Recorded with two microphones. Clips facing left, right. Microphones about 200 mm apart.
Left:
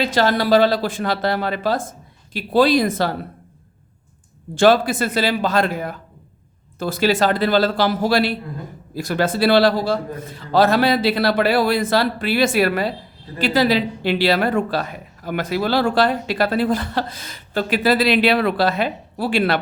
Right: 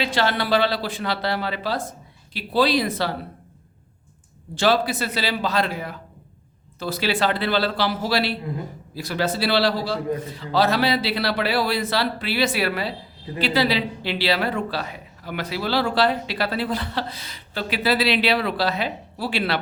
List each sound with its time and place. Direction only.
0.0 s a woman's voice: 40° left (ahead or behind)
4.5 s a woman's voice: 50° left (ahead or behind)